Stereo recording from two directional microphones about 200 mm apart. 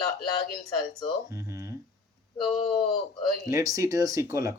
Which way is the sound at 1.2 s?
15° right (ahead or behind).